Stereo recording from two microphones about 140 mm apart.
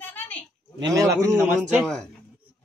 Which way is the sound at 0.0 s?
10° left (ahead or behind).